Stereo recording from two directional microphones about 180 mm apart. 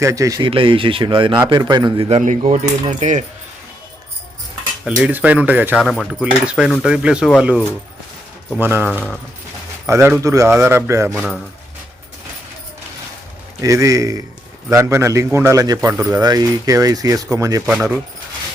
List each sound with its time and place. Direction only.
0.0 s a man's voice: 15° right (ahead or behind)
2.0 s speech: 40° right (ahead or behind)
5.0 s speech: 10° right (ahead or behind)
5.8 s speech: centre (ahead or behind)
8.9 s speech: 5° left (ahead or behind)
9.8 s speech: 15° right (ahead or behind)
13.6 s a man's voice: 15° right (ahead or behind)
17.7 s speech: 5° right (ahead or behind)